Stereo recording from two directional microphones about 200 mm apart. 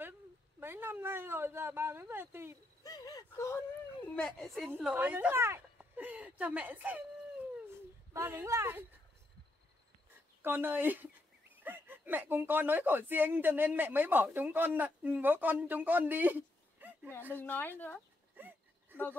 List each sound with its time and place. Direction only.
0.6 s speech: 10° right (ahead or behind)
2.8 s speech: 20° left (ahead or behind)
4.1 s speech: 5° left (ahead or behind)
4.6 s a woman's voice: 10° right (ahead or behind)
8.1 s speech: 10° right (ahead or behind)
10.4 s speech: 10° right (ahead or behind)
17.3 s speech: 10° left (ahead or behind)
18.3 s a sound: 10° right (ahead or behind)